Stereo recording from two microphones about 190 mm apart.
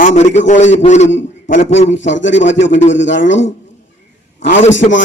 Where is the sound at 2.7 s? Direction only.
40° left (ahead or behind).